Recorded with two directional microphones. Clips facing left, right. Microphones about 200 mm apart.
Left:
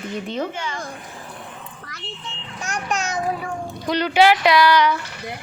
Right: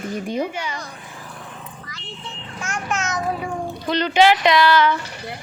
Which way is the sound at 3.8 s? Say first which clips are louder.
Even; 10° left (ahead or behind).